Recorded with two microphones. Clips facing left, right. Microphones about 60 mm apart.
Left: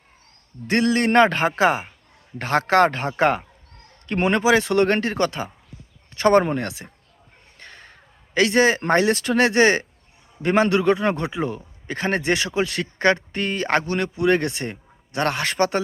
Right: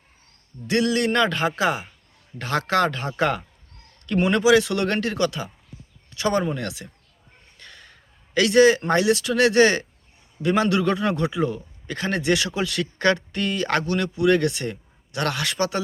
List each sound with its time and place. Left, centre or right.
0.7 s a man's voice: left
6.7 s a man's voice: left
7.6 s a sound: left
8.8 s a man's voice: left